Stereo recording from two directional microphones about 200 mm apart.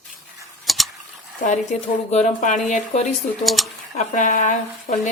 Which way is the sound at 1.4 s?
35° left (ahead or behind).